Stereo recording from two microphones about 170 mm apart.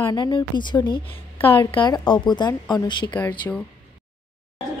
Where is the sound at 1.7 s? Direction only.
25° left (ahead or behind).